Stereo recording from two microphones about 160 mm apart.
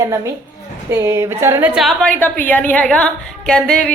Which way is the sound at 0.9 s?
15° right (ahead or behind).